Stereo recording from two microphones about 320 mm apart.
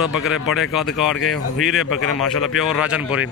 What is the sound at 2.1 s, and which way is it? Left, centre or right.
Speech, left.